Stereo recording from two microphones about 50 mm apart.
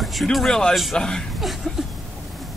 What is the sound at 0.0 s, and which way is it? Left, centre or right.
Speech, centre.